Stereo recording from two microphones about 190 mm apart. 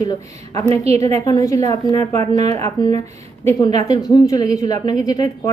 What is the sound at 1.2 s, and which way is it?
Speech, 20° left (ahead or behind).